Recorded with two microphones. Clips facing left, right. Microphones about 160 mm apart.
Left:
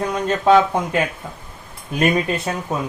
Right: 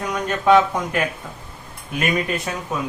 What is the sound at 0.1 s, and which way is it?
Speech, 30° left (ahead or behind).